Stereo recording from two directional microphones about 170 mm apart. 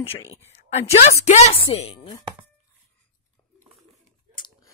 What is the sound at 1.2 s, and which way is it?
Speech, 40° left (ahead or behind).